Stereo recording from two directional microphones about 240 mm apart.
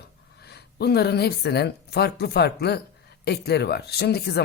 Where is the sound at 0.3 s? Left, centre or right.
Left.